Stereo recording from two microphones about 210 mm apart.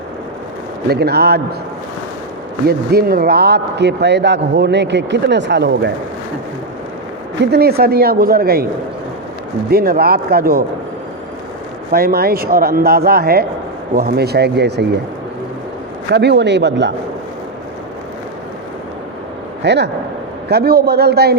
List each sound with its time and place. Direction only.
0.9 s speech: 50° right (ahead or behind)
2.6 s a man's voice: 45° right (ahead or behind)
7.5 s speech: 50° right (ahead or behind)
9.6 s speech: 45° right (ahead or behind)
11.9 s speech: 45° right (ahead or behind)
16.1 s a man's voice: 55° right (ahead or behind)
19.6 s speech: 55° right (ahead or behind)